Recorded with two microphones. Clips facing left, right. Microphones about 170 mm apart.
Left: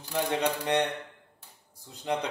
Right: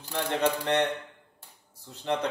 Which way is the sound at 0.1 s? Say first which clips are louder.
Right 1 dB; 15° left (ahead or behind).